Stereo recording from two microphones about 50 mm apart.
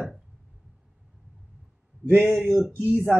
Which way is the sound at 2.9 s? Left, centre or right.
Right.